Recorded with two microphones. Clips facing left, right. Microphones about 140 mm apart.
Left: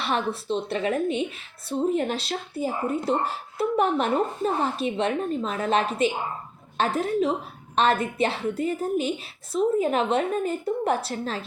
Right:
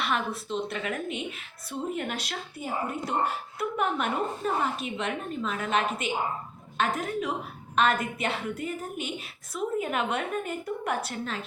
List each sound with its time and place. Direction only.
0.0 s speech: 30° left (ahead or behind)